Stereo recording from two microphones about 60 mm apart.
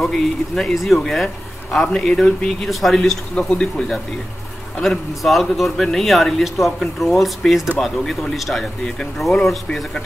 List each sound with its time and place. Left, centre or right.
0.0 s a man's voice: centre
3.3 s speech: centre
4.8 s a man's voice: centre